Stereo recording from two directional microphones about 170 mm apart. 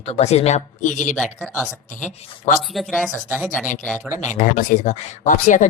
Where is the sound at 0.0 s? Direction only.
40° left (ahead or behind).